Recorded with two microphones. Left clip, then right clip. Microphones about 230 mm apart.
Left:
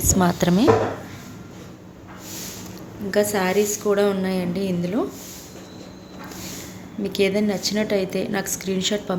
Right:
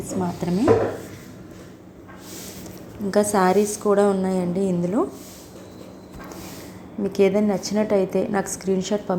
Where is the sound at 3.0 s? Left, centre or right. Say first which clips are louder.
Right 2 dB; right.